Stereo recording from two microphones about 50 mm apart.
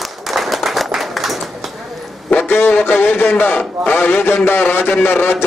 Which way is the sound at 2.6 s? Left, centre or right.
Left.